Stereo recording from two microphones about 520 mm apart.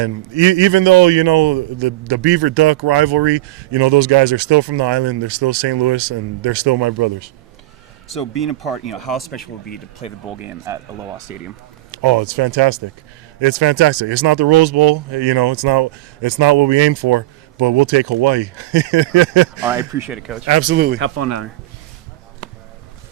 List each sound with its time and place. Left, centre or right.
0.0 s a man's voice: right
8.0 s speech: centre
9.6 s speech: centre
10.2 s speech: centre
12.0 s a man's voice: right
19.6 s speech: centre
20.4 s speech: right
21.2 s speech: right